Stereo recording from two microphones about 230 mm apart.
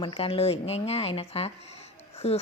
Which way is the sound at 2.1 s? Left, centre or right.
Left.